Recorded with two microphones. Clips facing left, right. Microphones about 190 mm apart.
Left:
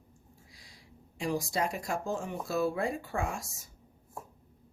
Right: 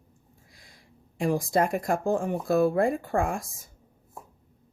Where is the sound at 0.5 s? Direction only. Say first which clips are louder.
Right 1 dB; 55° right (ahead or behind).